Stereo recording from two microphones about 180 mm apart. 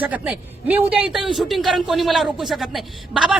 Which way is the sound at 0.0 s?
10° right (ahead or behind).